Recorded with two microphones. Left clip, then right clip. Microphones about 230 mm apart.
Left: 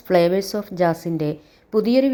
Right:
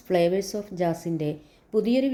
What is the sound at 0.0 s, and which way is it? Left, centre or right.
A woman's voice, centre.